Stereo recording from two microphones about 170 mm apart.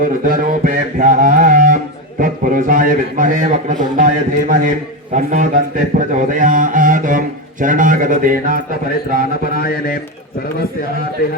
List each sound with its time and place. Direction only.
0.0 s music: 55° right (ahead or behind)
9.1 s mantra: 60° left (ahead or behind)